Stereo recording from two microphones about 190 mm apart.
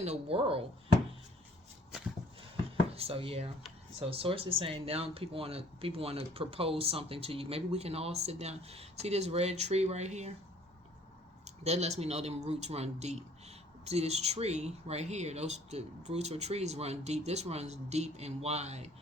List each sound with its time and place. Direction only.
0.0 s speech: 30° right (ahead or behind)
2.9 s speech: 30° right (ahead or behind)
11.4 s speech: 35° right (ahead or behind)